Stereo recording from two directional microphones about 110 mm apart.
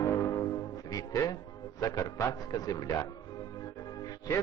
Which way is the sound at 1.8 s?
30° left (ahead or behind).